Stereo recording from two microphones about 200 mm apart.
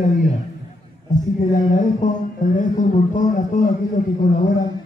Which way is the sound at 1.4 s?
40° left (ahead or behind).